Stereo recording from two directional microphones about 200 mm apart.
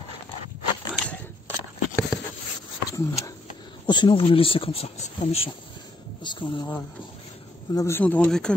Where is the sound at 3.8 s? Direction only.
20° left (ahead or behind).